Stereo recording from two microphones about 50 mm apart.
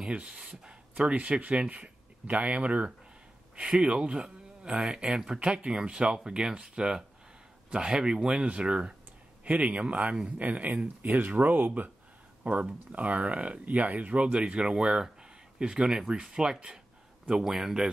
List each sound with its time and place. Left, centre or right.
0.0 s speech: right
10.4 s speech: right; by 17.8 s centre